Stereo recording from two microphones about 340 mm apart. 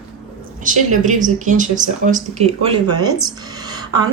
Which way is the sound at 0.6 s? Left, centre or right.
Right.